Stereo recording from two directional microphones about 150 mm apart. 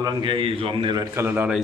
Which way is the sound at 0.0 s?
35° right (ahead or behind).